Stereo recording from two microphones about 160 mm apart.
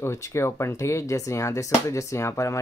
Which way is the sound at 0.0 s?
15° left (ahead or behind).